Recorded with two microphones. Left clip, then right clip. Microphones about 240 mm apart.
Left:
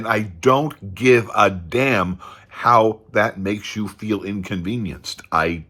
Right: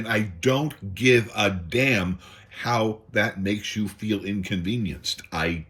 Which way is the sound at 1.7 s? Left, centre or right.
Left.